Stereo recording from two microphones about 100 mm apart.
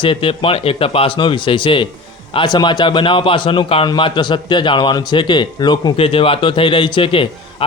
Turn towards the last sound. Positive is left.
turn(degrees=65)  # may be behind; listen again after turning